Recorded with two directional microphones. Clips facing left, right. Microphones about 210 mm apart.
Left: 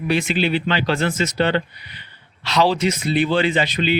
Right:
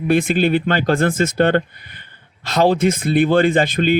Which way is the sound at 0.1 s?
55° right (ahead or behind).